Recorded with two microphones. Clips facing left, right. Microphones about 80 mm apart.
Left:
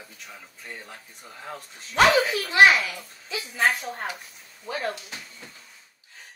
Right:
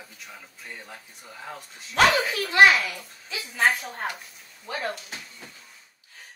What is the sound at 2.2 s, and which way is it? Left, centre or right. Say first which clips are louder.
Speech: even; centre.